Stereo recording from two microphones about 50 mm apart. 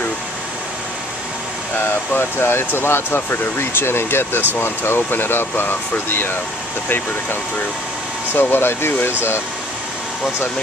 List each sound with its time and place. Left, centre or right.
2.1 s speech: left
8.3 s speech: left